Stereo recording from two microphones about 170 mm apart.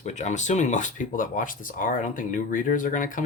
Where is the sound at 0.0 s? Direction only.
45° left (ahead or behind).